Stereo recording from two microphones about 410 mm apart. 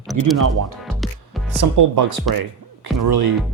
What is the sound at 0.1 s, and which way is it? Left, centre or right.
Speech, right.